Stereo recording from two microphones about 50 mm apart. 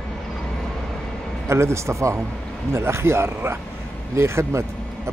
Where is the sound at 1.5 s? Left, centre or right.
Right.